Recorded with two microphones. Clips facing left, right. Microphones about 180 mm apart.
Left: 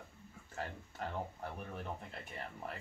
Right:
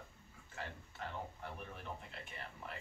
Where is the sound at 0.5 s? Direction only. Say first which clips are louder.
Left 4 dB; 40° left (ahead or behind).